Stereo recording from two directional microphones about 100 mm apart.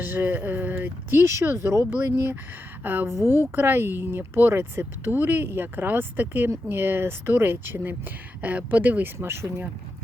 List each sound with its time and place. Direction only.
0.0 s speech: 20° right (ahead or behind)
1.3 s speech: 30° right (ahead or behind)